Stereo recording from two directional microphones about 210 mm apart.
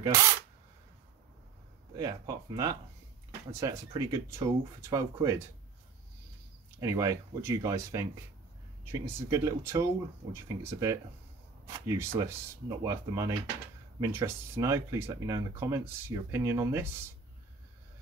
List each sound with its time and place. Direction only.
2.0 s speech: 15° right (ahead or behind)
6.8 s speech: 15° right (ahead or behind)